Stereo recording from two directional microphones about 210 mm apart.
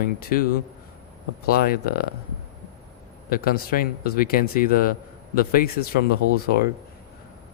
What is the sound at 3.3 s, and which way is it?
Speech, 45° left (ahead or behind).